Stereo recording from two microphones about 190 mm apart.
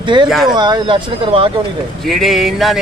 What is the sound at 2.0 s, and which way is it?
Speech, centre (ahead or behind).